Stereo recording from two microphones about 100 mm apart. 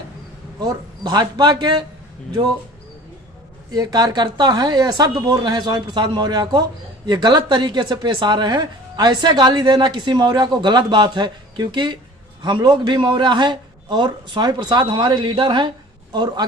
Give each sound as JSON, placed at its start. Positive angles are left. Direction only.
{"t": 0.6, "sound": "speech", "side_deg": -45}
{"t": 3.7, "sound": "speech", "side_deg": -40}